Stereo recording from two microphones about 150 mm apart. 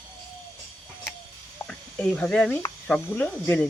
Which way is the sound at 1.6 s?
10° left (ahead or behind).